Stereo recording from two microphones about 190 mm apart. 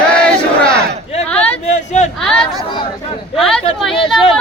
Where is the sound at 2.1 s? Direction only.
5° left (ahead or behind).